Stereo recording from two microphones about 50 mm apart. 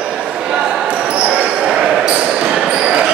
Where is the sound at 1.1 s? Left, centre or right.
Right.